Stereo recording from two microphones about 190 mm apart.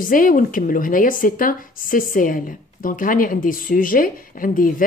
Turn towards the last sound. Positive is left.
turn(degrees=45)  # may be behind; listen again after turning